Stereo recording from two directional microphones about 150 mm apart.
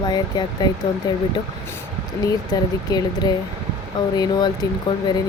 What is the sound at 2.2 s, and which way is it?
Speech, 25° left (ahead or behind).